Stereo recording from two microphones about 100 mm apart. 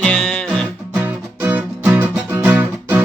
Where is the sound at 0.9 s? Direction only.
20° right (ahead or behind).